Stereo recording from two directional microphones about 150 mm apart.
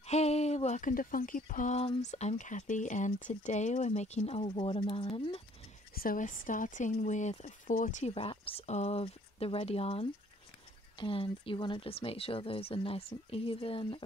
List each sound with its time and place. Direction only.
0.0 s speech: 45° left (ahead or behind)
5.9 s speech: 65° left (ahead or behind)
8.1 s speech: 40° left (ahead or behind)